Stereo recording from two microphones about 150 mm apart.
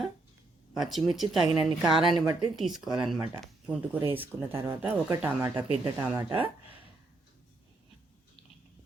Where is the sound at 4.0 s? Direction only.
15° right (ahead or behind).